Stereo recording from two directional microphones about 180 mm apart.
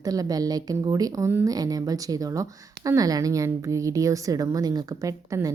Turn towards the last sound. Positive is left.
turn(degrees=-20)  # may be behind; listen again after turning